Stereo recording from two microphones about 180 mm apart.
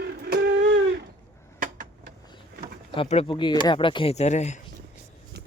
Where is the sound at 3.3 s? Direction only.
25° left (ahead or behind); by 4.6 s 40° left (ahead or behind).